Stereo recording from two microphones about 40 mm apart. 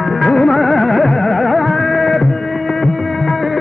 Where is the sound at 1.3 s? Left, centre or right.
Centre.